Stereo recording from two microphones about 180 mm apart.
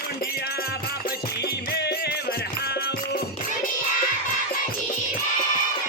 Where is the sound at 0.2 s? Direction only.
60° left (ahead or behind).